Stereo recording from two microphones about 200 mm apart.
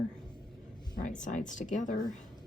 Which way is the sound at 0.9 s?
40° left (ahead or behind).